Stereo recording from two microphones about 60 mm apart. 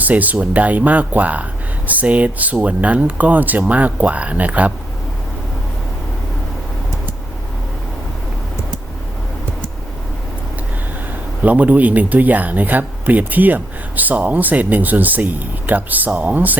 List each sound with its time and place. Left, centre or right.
0.0 s speech: right
11.4 s speech: right